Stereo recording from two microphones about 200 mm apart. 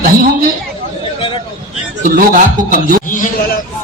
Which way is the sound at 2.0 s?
40° right (ahead or behind).